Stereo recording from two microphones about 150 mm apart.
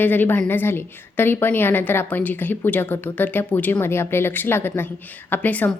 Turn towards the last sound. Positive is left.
turn(degrees=10)  # may be behind; listen again after turning